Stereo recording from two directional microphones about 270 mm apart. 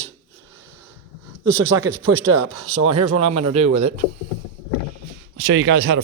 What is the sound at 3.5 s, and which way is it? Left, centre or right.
Speech, right.